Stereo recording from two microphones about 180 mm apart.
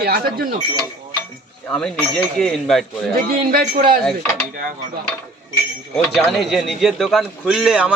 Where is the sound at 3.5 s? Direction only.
55° right (ahead or behind).